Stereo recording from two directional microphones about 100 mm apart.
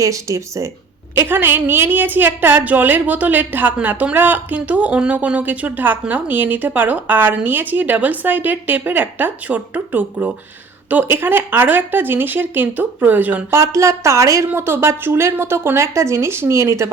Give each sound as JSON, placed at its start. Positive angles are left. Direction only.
{"t": 0.0, "sound": "speech", "side_deg": -30}
{"t": 1.1, "sound": "a woman's voice", "side_deg": -20}
{"t": 13.5, "sound": "speech", "side_deg": -30}